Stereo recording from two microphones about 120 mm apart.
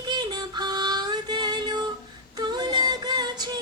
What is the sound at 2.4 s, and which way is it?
Female singing, 35° right (ahead or behind).